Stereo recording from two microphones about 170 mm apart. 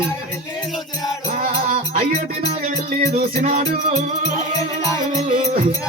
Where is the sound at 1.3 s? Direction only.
45° right (ahead or behind).